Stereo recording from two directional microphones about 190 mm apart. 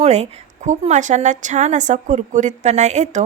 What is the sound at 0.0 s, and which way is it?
A woman's voice, 35° right (ahead or behind).